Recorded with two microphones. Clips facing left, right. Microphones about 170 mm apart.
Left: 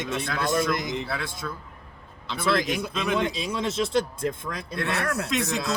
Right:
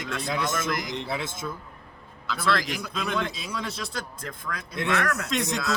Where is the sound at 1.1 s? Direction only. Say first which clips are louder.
Right 1 dB; 20° right (ahead or behind).